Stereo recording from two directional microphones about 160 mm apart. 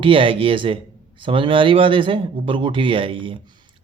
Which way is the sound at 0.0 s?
35° right (ahead or behind).